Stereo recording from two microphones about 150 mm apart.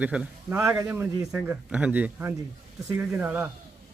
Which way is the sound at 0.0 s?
10° right (ahead or behind).